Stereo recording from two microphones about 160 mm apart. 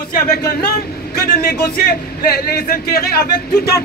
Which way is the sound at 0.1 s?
70° left (ahead or behind).